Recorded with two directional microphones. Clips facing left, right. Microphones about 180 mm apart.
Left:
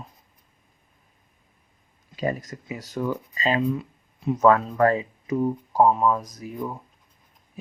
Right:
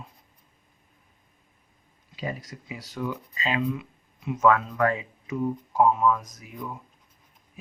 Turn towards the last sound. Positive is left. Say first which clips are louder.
# left 7 dB
turn(degrees=35)  # may be behind; listen again after turning